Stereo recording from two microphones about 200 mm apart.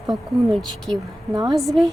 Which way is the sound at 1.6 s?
Centre (ahead or behind).